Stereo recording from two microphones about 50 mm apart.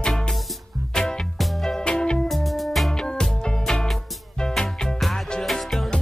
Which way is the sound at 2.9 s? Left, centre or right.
Centre.